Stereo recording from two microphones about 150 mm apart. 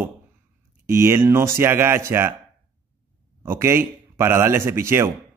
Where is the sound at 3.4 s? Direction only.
15° right (ahead or behind).